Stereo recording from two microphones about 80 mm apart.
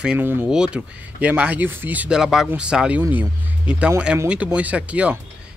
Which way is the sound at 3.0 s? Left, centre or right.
Right.